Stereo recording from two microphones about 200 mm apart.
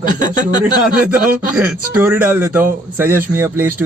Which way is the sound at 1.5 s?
5° right (ahead or behind).